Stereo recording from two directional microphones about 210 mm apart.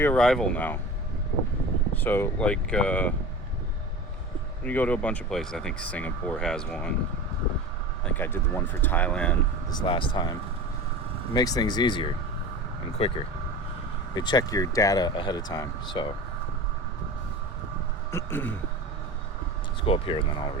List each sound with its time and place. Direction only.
0.0 s speech: 5° left (ahead or behind)
2.0 s speech: 10° left (ahead or behind)
4.6 s speech: 5° left (ahead or behind)
8.0 s speech: 10° left (ahead or behind)
9.6 s speech: 25° left (ahead or behind)
11.3 s speech: 20° left (ahead or behind)
18.1 s speech: 10° left (ahead or behind)
19.8 s speech: 25° left (ahead or behind)